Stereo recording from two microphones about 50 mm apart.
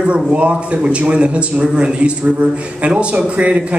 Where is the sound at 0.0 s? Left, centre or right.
Right.